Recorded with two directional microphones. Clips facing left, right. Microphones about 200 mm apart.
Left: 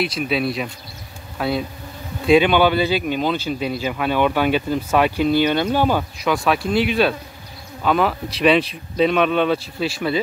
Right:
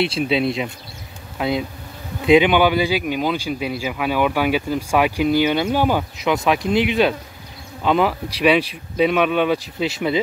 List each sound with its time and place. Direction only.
0.0 s bee: 30° right (ahead or behind)
2.2 s speech: 15° right (ahead or behind)